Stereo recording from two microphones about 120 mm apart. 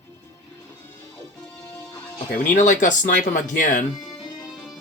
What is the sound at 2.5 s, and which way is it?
Speech, 90° left.